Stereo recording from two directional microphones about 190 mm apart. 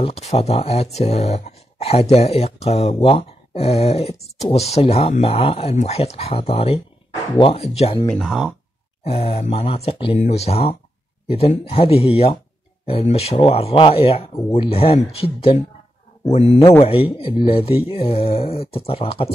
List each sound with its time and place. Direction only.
0.0 s speech: 35° left (ahead or behind)
8.1 s speech: centre (ahead or behind)
9.0 s speech: 30° left (ahead or behind)